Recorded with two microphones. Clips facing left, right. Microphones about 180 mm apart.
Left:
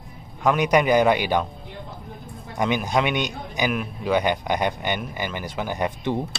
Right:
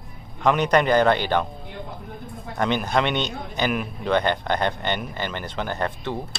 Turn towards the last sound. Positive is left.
turn(degrees=15)  # may be behind; listen again after turning